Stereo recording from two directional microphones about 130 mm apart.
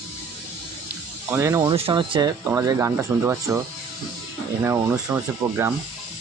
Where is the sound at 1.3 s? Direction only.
20° right (ahead or behind).